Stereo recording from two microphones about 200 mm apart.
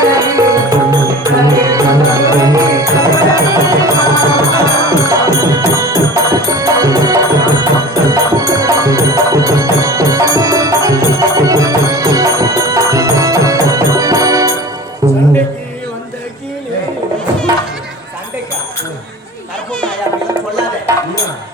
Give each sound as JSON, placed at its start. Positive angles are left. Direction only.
{"t": 0.0, "sound": "music", "side_deg": -15}